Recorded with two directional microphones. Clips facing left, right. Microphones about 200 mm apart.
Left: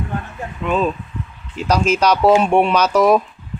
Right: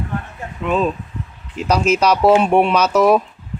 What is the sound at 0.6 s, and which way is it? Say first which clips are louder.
Speech: right 1 dB; centre (ahead or behind).